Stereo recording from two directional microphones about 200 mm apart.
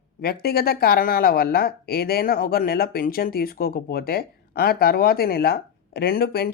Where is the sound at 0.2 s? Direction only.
50° left (ahead or behind).